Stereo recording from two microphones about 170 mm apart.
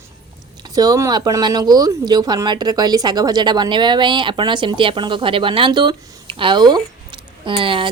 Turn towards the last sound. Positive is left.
turn(degrees=-30)  # may be behind; listen again after turning